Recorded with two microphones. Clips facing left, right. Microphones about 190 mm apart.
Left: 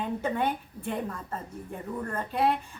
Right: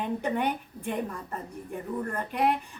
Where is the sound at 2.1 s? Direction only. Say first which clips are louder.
Left 1 dB; 15° right (ahead or behind).